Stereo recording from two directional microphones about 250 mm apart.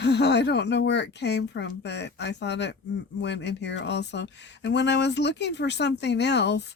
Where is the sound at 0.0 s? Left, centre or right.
Left.